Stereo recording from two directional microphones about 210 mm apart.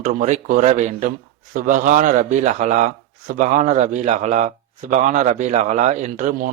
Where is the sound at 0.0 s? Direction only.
35° right (ahead or behind).